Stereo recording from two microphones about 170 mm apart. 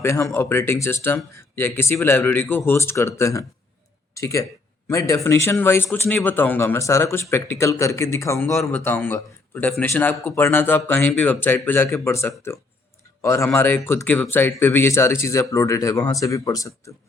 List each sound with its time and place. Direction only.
0.0 s a man's voice: 15° left (ahead or behind)